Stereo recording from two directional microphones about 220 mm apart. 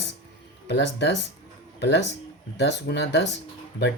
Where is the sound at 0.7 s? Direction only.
55° left (ahead or behind).